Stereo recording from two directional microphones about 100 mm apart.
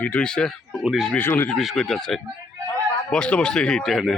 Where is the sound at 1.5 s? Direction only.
Centre (ahead or behind).